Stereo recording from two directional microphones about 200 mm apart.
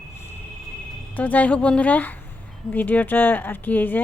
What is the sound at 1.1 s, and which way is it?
Speech, 5° left (ahead or behind).